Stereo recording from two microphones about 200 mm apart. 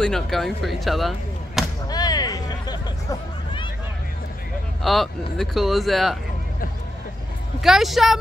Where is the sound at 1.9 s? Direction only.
20° left (ahead or behind).